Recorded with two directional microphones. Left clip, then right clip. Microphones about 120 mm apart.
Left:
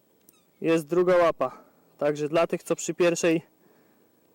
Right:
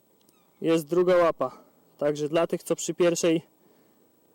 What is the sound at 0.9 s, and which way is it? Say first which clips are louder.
Speech: even; 5° left (ahead or behind).